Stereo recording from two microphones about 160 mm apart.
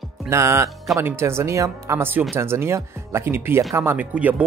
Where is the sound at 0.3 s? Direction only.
15° right (ahead or behind).